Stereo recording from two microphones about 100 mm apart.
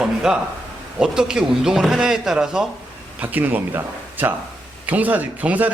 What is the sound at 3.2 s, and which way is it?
A man's voice, 15° right (ahead or behind).